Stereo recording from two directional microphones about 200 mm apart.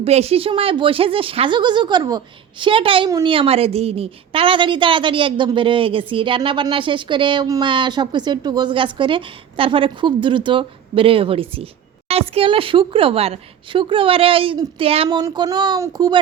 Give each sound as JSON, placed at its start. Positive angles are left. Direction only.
{"t": 0.0, "sound": "speech", "side_deg": -30}